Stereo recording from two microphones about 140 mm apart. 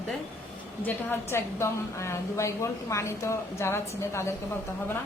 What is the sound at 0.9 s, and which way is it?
A woman's voice, 20° left (ahead or behind).